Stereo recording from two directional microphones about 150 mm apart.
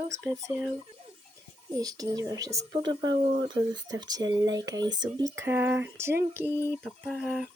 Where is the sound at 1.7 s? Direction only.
25° right (ahead or behind).